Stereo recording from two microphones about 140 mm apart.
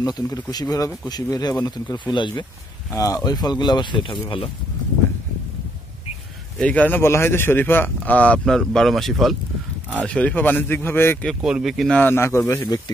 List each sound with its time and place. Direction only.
0.0 s speech: 30° left (ahead or behind)
6.6 s speech: 10° left (ahead or behind)
11.2 s speech: centre (ahead or behind)
12.0 s speech: 15° left (ahead or behind)
12.6 s speech: 30° left (ahead or behind)